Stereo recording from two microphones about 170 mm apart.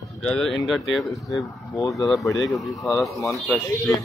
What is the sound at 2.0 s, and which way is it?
Speech, centre (ahead or behind).